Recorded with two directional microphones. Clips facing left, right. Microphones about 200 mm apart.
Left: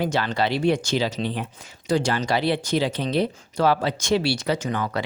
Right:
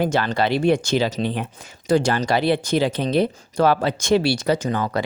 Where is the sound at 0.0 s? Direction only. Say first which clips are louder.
Right 3 dB; 50° right (ahead or behind).